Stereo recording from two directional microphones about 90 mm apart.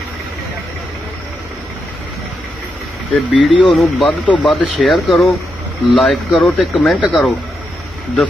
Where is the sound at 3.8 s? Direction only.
Centre (ahead or behind).